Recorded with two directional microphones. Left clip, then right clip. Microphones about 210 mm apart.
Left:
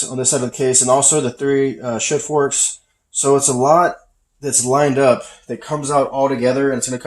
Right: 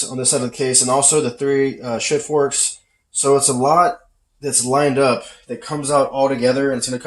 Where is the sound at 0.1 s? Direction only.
35° left (ahead or behind).